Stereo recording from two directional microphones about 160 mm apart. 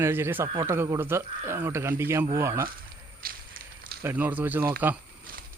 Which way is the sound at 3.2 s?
65° right (ahead or behind).